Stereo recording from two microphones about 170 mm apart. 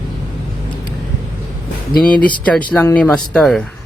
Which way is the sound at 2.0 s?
55° left (ahead or behind).